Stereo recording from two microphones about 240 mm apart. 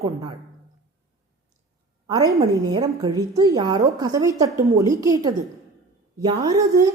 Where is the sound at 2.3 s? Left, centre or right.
Centre.